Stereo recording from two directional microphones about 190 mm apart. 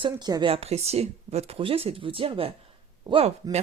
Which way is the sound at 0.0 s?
20° right (ahead or behind).